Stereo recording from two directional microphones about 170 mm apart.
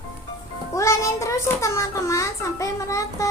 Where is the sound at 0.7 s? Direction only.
15° left (ahead or behind).